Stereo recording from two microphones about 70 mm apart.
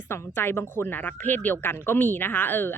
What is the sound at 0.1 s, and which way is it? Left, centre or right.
Speech, left.